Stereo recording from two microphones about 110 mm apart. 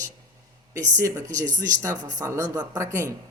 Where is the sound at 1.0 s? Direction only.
30° right (ahead or behind).